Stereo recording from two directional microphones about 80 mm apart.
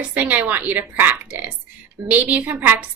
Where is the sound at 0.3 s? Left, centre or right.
Right.